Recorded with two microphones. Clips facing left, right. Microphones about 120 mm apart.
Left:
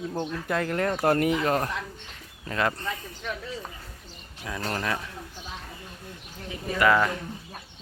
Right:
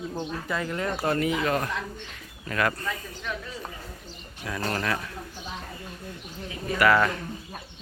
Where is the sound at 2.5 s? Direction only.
25° left (ahead or behind).